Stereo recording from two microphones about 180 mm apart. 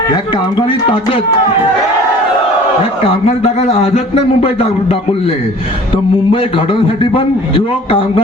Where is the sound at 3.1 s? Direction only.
35° left (ahead or behind).